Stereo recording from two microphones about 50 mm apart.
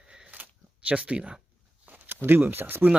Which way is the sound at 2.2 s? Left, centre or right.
Right.